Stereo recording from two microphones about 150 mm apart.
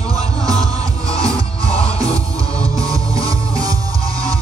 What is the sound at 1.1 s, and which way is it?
Music, 25° right (ahead or behind).